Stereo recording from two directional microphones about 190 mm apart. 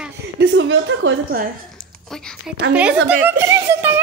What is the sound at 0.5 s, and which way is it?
Speech, 70° right (ahead or behind).